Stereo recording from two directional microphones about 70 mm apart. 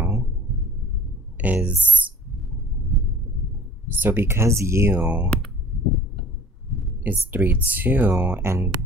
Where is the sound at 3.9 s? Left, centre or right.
Right.